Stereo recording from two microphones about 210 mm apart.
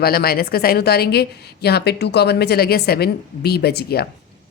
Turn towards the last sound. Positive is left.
turn(degrees=50)  # may be behind; listen again after turning